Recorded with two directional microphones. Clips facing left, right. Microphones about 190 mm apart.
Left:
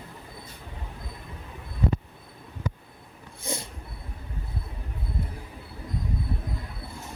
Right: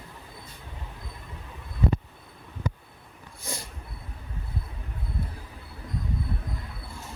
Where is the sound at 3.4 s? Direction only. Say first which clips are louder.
Left 4 dB; 20° left (ahead or behind).